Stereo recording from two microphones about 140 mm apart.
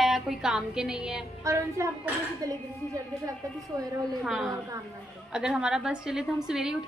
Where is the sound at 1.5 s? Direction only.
20° right (ahead or behind).